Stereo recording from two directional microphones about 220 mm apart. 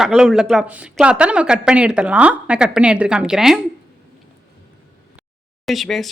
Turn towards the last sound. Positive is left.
turn(degrees=0)  # may be behind; listen again after turning